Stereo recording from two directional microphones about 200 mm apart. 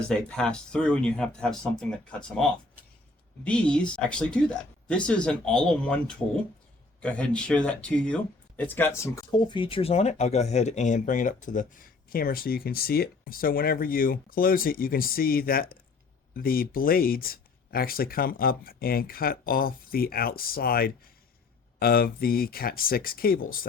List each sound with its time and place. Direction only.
0.1 s speech: 5° left (ahead or behind); by 23.4 s 50° left (ahead or behind)